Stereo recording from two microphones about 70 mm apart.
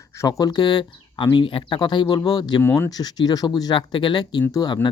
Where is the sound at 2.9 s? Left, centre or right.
Left.